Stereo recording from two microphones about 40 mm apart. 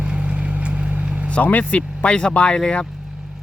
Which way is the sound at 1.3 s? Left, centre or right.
Left.